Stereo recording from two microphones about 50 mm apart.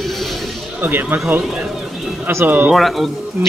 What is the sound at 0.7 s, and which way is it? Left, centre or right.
Speech, right.